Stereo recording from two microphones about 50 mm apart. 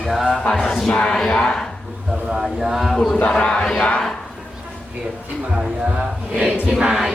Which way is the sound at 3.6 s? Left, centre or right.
Centre.